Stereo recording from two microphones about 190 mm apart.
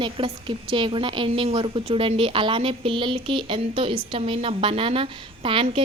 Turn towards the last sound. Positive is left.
turn(degrees=-30)  # may be behind; listen again after turning